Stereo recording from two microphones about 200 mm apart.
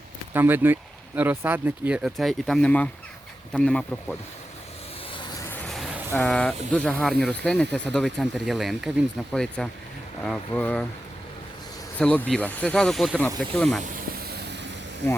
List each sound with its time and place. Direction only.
0.3 s speech: 10° right (ahead or behind); by 4.2 s 5° left (ahead or behind)
5.1 s a sound: 10° left (ahead or behind); by 6.1 s 10° right (ahead or behind)
6.1 s speech: 5° left (ahead or behind)
11.9 s speech: 5° left (ahead or behind)
14.3 s vehicle: 55° right (ahead or behind)